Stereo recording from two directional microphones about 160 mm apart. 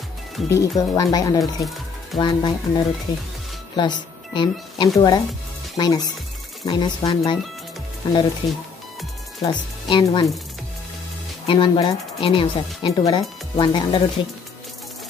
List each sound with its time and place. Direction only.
0.5 s speech: 20° left (ahead or behind)
1.4 s speech: centre (ahead or behind)
2.1 s speech: 30° left (ahead or behind)
8.4 s speech: 25° left (ahead or behind)
11.4 s speech: 30° left (ahead or behind)